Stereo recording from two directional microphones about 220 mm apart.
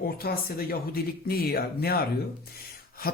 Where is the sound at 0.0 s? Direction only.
45° left (ahead or behind).